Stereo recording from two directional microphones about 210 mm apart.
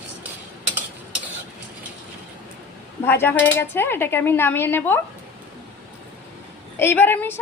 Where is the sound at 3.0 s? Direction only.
10° left (ahead or behind).